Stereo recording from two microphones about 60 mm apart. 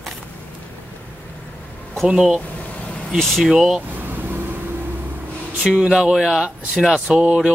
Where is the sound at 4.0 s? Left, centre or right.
Right.